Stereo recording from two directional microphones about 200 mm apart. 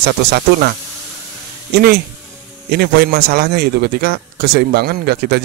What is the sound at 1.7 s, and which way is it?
Speech, 50° right (ahead or behind).